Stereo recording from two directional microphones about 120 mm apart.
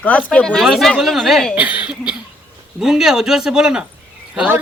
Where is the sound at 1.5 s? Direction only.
10° right (ahead or behind).